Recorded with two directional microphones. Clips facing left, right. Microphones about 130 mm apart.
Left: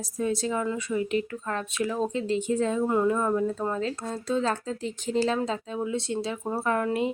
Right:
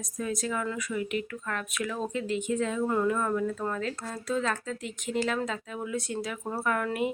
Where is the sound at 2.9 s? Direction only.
20° left (ahead or behind).